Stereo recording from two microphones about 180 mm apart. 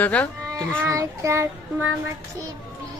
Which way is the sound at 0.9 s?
15° right (ahead or behind).